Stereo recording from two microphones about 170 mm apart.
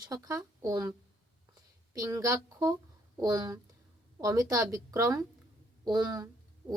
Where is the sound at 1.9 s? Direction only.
20° right (ahead or behind).